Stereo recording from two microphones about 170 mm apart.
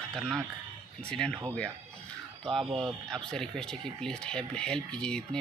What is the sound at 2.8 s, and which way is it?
Speech, 5° left (ahead or behind).